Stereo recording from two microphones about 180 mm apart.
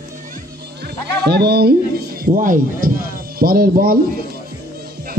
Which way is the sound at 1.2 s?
65° right (ahead or behind).